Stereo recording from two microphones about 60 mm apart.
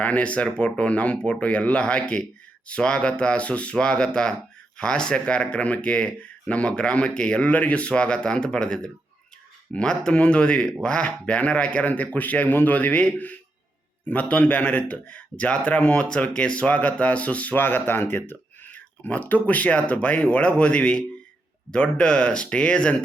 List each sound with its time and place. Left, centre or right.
0.0 s speech: left